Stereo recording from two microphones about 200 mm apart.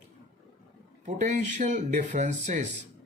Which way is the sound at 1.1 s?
35° right (ahead or behind).